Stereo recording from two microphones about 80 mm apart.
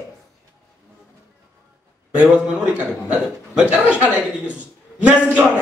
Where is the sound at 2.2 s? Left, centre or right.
Centre.